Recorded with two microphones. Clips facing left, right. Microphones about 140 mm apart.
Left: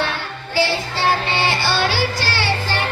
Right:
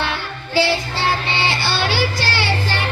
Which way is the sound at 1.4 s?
15° left (ahead or behind).